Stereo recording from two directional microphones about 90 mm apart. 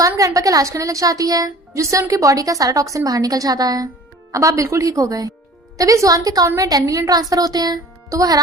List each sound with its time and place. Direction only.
0.0 s a woman's voice: 40° right (ahead or behind)